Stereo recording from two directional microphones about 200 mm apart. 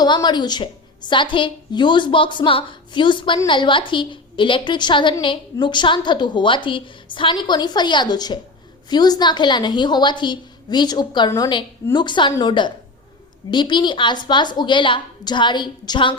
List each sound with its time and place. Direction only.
0.0 s a woman's voice: 20° left (ahead or behind)